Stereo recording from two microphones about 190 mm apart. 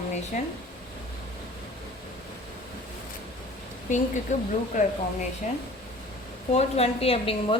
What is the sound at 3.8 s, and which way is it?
A woman's voice, 40° left (ahead or behind).